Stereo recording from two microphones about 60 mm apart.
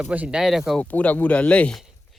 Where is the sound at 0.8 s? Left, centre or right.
Left.